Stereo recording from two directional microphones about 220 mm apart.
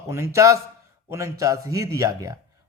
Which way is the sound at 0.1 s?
10° right (ahead or behind).